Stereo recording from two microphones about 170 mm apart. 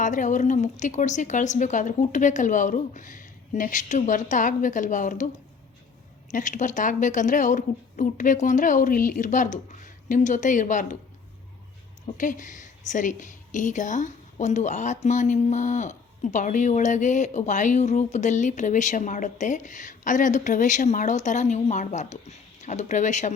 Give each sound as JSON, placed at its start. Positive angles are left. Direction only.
{"t": 0.0, "sound": "a woman's voice", "side_deg": 50}
{"t": 6.3, "sound": "a woman's voice", "side_deg": 50}
{"t": 12.0, "sound": "a woman's voice", "side_deg": 50}